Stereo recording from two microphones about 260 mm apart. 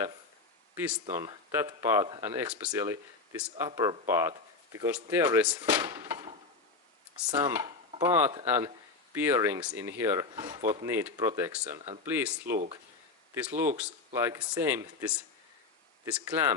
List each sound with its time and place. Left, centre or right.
0.8 s speech: centre
5.8 s a sound: centre
7.3 s speech: centre
12.5 s speech: right
13.3 s speech: centre